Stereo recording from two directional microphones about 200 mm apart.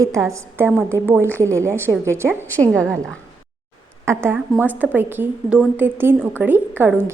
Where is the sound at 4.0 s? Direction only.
10° right (ahead or behind).